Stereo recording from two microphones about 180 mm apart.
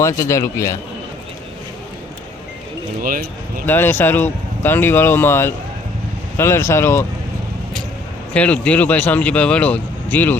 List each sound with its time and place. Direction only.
0.0 s speech: 15° left (ahead or behind)
3.0 s speech: 50° right (ahead or behind)
3.7 s speech: 10° left (ahead or behind)
8.3 s speech: 5° left (ahead or behind)